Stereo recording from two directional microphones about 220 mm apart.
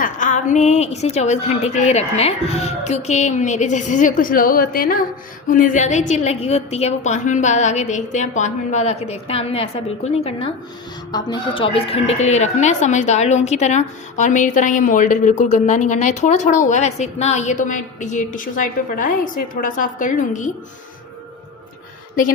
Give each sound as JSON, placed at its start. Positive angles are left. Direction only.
{"t": 0.0, "sound": "speech", "side_deg": 35}